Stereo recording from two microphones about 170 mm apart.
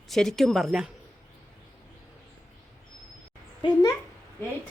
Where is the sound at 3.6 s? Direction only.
25° left (ahead or behind).